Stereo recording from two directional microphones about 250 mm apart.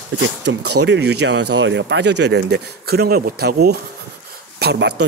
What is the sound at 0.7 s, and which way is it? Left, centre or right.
Speech, right.